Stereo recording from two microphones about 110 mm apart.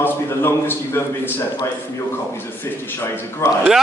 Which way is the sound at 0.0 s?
20° left (ahead or behind).